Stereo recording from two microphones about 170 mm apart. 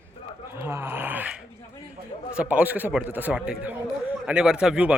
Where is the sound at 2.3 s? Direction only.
10° right (ahead or behind).